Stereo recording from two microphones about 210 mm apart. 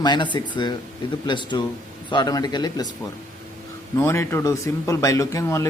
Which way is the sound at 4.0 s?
10° left (ahead or behind).